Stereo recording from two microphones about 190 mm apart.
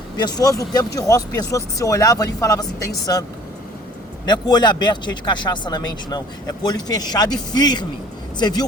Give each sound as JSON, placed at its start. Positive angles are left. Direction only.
{"t": 0.2, "sound": "speech", "side_deg": 20}
{"t": 4.3, "sound": "speech", "side_deg": 25}